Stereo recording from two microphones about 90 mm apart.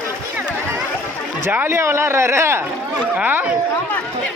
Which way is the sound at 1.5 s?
20° right (ahead or behind).